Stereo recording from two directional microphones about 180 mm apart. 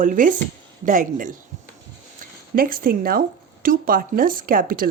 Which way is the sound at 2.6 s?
55° right (ahead or behind).